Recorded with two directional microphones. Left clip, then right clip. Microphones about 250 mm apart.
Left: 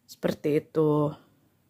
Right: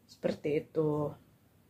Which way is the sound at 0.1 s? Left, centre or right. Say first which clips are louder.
Left 6 dB; left.